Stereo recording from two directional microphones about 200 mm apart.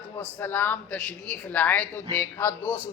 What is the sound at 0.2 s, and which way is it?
A woman's voice, 10° left (ahead or behind).